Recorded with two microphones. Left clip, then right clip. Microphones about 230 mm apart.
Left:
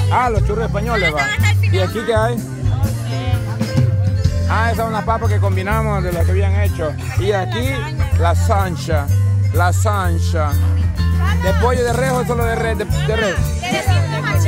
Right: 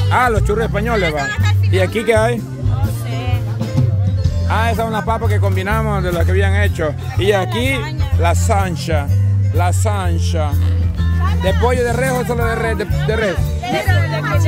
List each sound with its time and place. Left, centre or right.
0.1 s speech: centre
1.0 s speech: left
2.0 s speech: centre
4.5 s speech: centre
6.1 s speech: centre
11.6 s speech: centre
13.2 s speech: centre